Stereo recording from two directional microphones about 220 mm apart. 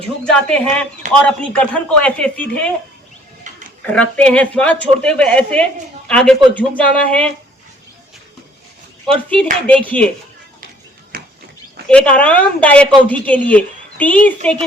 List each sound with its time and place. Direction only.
0.3 s a woman's voice: 5° left (ahead or behind)
3.5 s a sound: 35° right (ahead or behind)
3.8 s a woman's voice: 5° left (ahead or behind)
9.3 s a woman's voice: 5° left (ahead or behind)
11.9 s a woman's voice: 5° left (ahead or behind)